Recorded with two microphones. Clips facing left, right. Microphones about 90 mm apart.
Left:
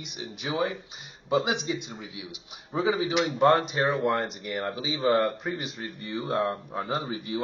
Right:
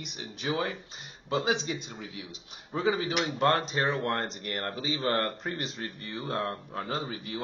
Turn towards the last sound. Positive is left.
turn(degrees=20)  # may be behind; listen again after turning